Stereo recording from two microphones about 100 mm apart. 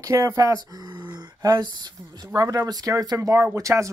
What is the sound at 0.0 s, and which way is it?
Speech, 35° right (ahead or behind).